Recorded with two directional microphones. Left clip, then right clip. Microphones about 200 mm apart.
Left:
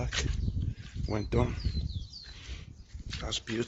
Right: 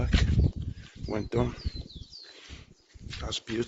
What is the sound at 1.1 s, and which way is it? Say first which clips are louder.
Speech: right 2 dB; 15° right (ahead or behind).